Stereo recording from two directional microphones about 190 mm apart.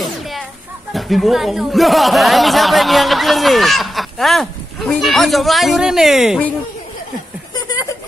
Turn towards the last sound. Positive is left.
turn(degrees=20)  # may be behind; listen again after turning